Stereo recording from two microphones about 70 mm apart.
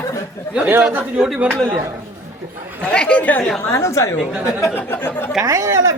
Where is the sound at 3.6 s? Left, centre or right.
Left.